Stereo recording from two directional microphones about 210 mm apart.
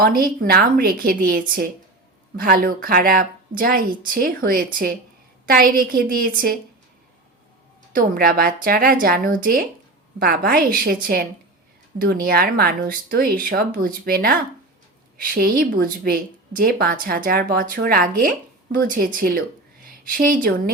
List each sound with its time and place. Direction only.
0.0 s a woman's voice: 45° right (ahead or behind)
7.9 s a woman's voice: 45° right (ahead or behind)